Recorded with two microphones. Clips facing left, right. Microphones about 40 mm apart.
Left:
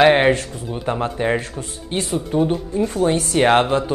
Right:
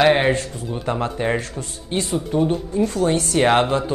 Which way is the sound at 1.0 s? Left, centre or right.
Centre.